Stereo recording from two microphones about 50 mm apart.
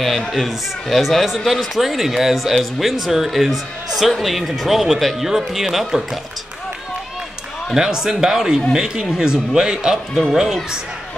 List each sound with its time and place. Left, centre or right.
0.0 s a man's voice: centre
7.7 s speech: centre